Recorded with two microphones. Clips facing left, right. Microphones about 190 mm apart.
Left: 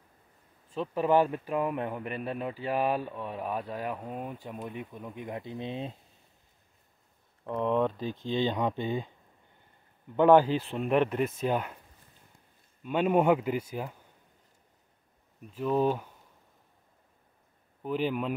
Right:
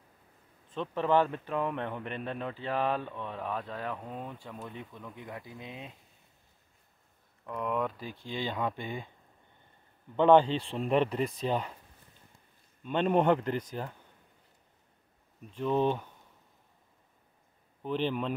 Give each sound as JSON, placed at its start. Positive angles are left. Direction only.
{"t": 0.7, "sound": "speech", "side_deg": 10}
{"t": 7.4, "sound": "speech", "side_deg": 25}
{"t": 10.1, "sound": "speech", "side_deg": 5}
{"t": 12.8, "sound": "speech", "side_deg": 5}
{"t": 15.5, "sound": "speech", "side_deg": 5}
{"t": 17.8, "sound": "speech", "side_deg": 10}